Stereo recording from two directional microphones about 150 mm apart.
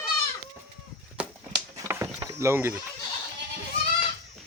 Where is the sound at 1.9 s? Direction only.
20° right (ahead or behind).